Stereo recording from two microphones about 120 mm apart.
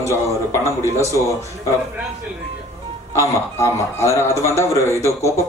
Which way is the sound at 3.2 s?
25° left (ahead or behind).